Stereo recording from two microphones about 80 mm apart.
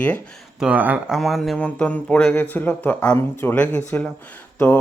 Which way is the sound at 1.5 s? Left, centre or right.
Centre.